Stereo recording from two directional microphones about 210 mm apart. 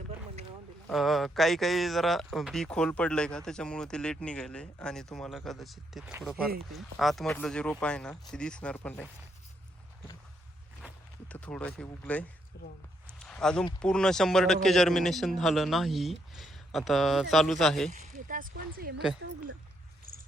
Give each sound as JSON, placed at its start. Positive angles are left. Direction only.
{"t": 0.9, "sound": "speech", "side_deg": 0}
{"t": 11.3, "sound": "speech", "side_deg": 5}
{"t": 12.5, "sound": "speech", "side_deg": 50}
{"t": 13.1, "sound": "a sound", "side_deg": 5}
{"t": 13.7, "sound": "speech", "side_deg": 5}
{"t": 17.9, "sound": "speech", "side_deg": -40}